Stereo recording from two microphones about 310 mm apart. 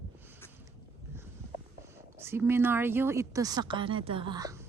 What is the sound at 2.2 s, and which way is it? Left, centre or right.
A woman's voice, centre.